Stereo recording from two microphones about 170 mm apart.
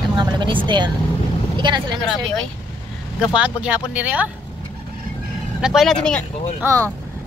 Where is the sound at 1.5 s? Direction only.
30° right (ahead or behind).